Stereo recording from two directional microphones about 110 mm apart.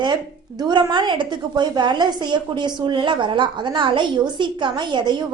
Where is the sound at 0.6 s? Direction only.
45° right (ahead or behind).